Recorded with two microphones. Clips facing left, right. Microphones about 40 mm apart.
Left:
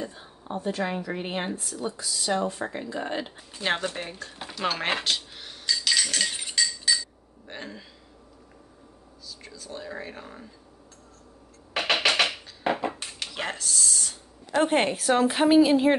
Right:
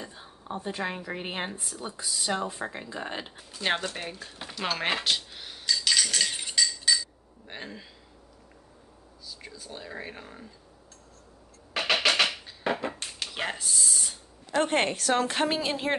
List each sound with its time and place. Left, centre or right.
0.0 s a sound: centre
0.6 s speech: centre
2.6 s a woman's voice: centre
3.6 s speech: left
3.9 s a woman's voice: centre
4.3 s dishes: centre
5.7 s a sound: centre
7.4 s speech: centre
9.4 s speech: centre
12.1 s music: centre
12.7 s a sound: centre
13.3 s a sound: centre
14.5 s a woman's voice: centre